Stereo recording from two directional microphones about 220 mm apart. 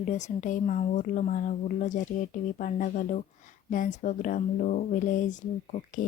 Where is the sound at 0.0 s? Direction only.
35° left (ahead or behind).